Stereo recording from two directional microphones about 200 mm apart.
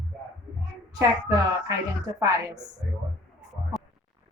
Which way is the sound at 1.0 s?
15° right (ahead or behind).